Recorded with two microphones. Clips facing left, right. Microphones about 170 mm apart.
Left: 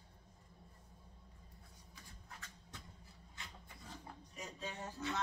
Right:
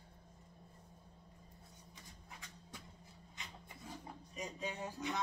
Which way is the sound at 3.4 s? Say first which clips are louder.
Right 2 dB; 15° right (ahead or behind).